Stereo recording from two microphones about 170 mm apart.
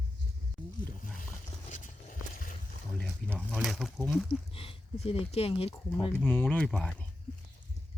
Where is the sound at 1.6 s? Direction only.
45° left (ahead or behind).